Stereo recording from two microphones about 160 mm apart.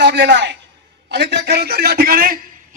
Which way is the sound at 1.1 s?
90° right.